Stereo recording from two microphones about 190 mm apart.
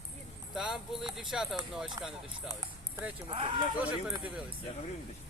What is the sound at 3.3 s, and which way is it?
Speech, 25° right (ahead or behind).